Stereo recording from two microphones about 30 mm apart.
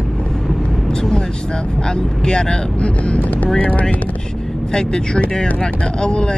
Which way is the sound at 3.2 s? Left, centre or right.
Left.